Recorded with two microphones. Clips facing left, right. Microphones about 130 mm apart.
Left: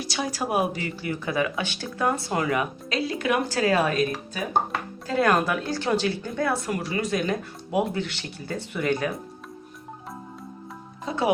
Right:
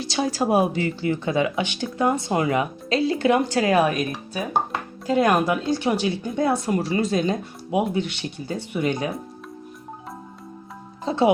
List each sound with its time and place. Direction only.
0.0 s speech: 30° right (ahead or behind)
5.0 s speech: 20° right (ahead or behind)
11.0 s music: 30° right (ahead or behind)